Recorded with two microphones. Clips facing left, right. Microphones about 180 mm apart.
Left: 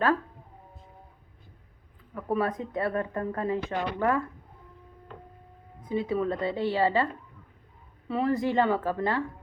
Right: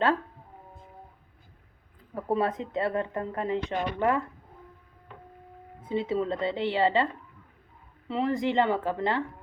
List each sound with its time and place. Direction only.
2.1 s speech: 25° right (ahead or behind)
5.8 s speech: 25° right (ahead or behind)